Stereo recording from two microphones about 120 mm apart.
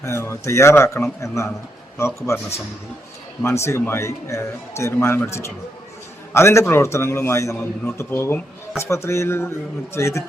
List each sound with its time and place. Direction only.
0.0 s speech: 20° left (ahead or behind)
3.4 s speech: 25° left (ahead or behind)